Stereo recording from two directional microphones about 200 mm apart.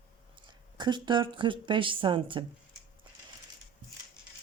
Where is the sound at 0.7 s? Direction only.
25° right (ahead or behind).